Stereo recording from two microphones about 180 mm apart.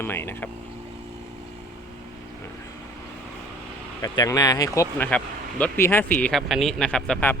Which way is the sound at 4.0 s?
20° left (ahead or behind).